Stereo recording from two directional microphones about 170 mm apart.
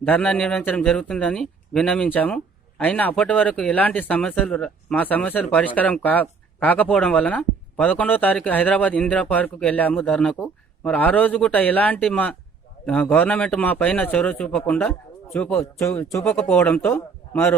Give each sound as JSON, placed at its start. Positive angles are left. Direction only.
{"t": 0.0, "sound": "a man's voice", "side_deg": 10}
{"t": 15.8, "sound": "a man's voice", "side_deg": 15}
{"t": 16.2, "sound": "a man's voice", "side_deg": 5}